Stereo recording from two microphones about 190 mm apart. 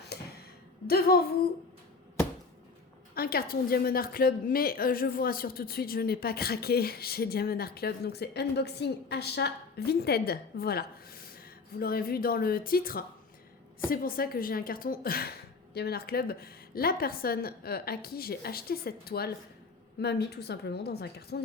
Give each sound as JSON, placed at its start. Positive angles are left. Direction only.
{"t": 0.9, "sound": "a woman's voice", "side_deg": 55}
{"t": 3.2, "sound": "a woman's voice", "side_deg": 50}